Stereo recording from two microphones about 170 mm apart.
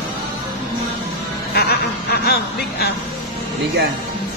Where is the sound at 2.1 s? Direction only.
70° left (ahead or behind).